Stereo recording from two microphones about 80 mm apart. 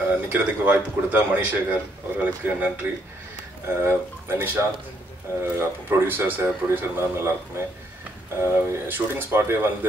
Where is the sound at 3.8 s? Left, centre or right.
Right.